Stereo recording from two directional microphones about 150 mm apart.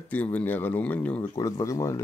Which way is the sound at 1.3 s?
25° left (ahead or behind).